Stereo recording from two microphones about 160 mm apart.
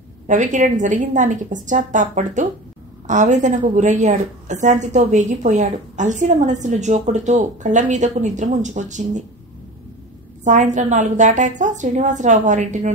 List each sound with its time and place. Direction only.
0.3 s a woman's voice: 50° right (ahead or behind)
10.4 s a woman's voice: 50° right (ahead or behind)